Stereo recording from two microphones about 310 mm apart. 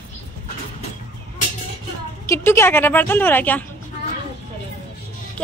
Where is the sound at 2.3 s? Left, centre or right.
Centre.